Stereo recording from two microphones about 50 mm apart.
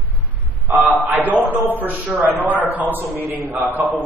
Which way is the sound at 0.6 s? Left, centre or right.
Right.